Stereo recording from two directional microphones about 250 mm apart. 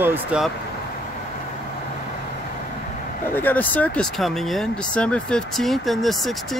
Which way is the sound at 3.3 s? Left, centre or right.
Centre.